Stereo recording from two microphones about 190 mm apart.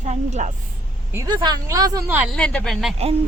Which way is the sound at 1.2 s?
20° right (ahead or behind).